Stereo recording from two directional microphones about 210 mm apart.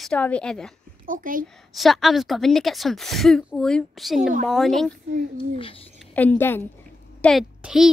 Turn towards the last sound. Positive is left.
turn(degrees=0)  # may be behind; listen again after turning